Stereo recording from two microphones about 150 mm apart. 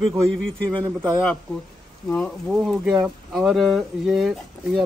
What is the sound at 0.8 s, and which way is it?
Speech, 25° right (ahead or behind).